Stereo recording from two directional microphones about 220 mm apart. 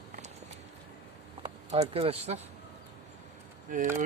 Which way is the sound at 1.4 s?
30° right (ahead or behind).